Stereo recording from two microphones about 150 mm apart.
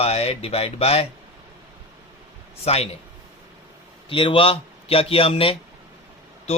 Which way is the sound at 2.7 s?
45° left (ahead or behind).